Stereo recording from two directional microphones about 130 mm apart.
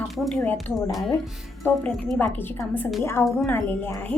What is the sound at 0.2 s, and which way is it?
A woman's voice, centre (ahead or behind).